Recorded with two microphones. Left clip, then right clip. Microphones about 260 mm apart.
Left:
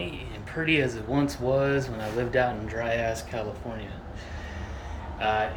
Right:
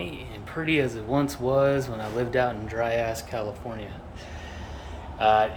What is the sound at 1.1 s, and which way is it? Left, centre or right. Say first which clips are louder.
Speech: right 2 dB; centre.